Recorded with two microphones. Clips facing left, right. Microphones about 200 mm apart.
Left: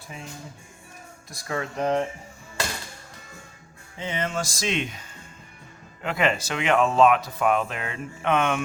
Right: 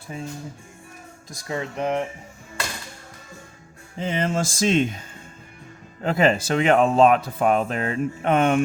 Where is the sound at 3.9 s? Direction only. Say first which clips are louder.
Right 5 dB; 35° right (ahead or behind).